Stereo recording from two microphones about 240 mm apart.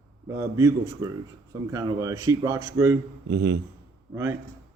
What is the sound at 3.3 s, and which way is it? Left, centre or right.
Speech, right.